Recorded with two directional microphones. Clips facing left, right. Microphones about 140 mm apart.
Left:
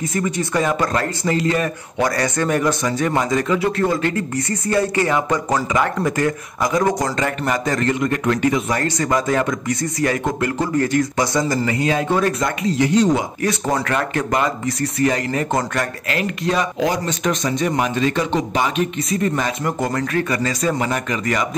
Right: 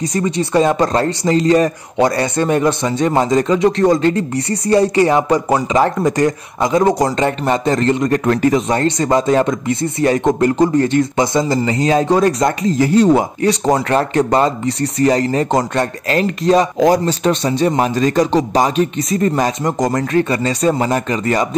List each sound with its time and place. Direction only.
0.1 s a man's voice: 35° right (ahead or behind)
12.9 s speech: 60° right (ahead or behind)
13.4 s a man's voice: 30° right (ahead or behind)